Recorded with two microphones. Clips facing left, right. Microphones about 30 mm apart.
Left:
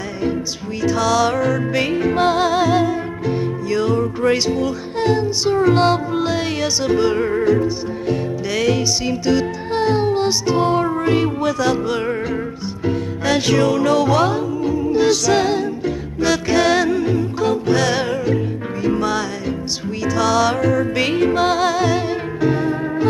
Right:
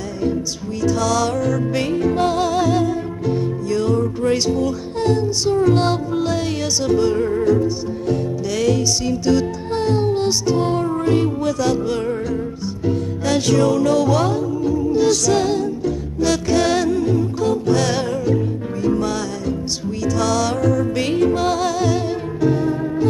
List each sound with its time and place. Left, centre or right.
0.8 s music: centre
7.6 s music: centre